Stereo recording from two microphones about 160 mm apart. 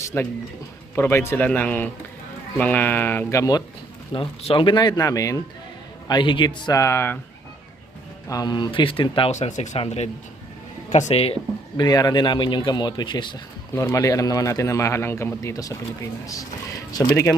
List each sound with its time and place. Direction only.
0.0 s speech: 15° left (ahead or behind)
4.1 s a man's voice: 35° left (ahead or behind); by 7.2 s 15° left (ahead or behind)
8.3 s speech: 25° left (ahead or behind)
9.3 s speech: 45° left (ahead or behind)
11.8 s a man's voice: 25° left (ahead or behind)